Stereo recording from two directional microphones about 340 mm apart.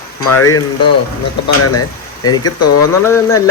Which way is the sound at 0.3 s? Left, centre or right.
Left.